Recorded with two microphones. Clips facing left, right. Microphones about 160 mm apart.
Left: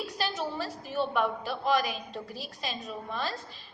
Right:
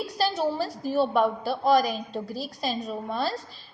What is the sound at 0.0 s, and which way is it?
A woman's voice, 35° right (ahead or behind).